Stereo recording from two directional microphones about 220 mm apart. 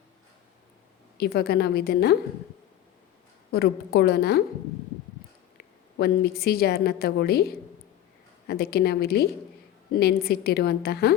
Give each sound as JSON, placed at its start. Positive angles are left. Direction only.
{"t": 1.2, "sound": "a woman's voice", "side_deg": 45}
{"t": 3.5, "sound": "a woman's voice", "side_deg": 45}
{"t": 5.5, "sound": "a woman's voice", "side_deg": 45}